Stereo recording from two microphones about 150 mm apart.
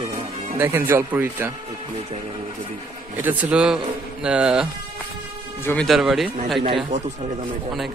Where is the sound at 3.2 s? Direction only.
10° right (ahead or behind).